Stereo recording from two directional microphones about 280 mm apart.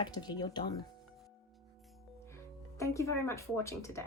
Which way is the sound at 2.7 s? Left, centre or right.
Centre.